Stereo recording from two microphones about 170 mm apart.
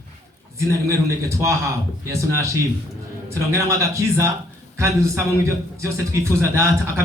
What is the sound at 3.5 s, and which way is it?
A man's voice, 15° right (ahead or behind).